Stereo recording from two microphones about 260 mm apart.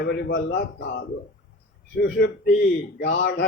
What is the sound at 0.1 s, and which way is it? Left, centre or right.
A man's voice, left.